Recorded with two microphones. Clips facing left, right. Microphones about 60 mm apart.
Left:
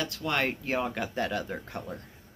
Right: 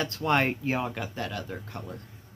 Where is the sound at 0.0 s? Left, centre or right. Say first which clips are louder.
Right 4 dB; right.